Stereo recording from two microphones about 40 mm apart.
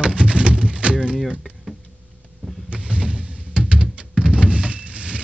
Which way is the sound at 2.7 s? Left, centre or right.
Right.